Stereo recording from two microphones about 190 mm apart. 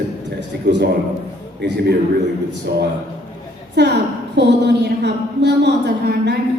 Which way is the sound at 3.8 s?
65° right (ahead or behind).